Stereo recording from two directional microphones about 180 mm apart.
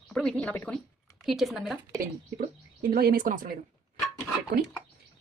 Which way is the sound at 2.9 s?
55° right (ahead or behind).